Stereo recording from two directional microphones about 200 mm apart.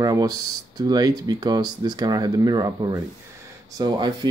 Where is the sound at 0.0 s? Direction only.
20° right (ahead or behind).